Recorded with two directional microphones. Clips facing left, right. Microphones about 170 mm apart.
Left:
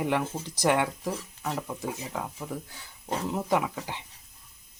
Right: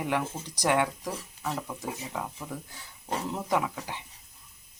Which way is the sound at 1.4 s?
Centre (ahead or behind).